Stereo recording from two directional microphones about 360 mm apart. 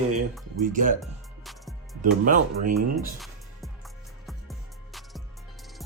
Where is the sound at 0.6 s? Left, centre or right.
Right.